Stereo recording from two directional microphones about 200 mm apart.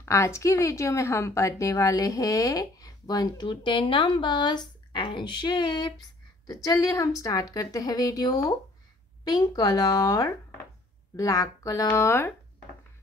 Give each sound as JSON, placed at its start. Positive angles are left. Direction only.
{"t": 0.0, "sound": "a woman's voice", "side_deg": 15}